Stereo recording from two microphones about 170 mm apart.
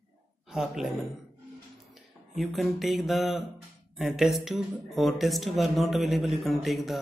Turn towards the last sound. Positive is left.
turn(degrees=0)  # may be behind; listen again after turning